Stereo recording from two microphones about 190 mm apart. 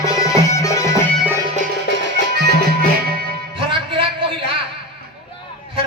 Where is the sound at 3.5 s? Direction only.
25° right (ahead or behind).